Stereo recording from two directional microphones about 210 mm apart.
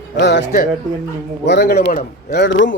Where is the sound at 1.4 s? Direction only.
55° left (ahead or behind).